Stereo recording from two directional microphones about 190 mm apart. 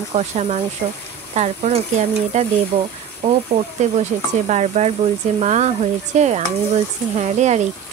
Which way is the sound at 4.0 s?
35° right (ahead or behind).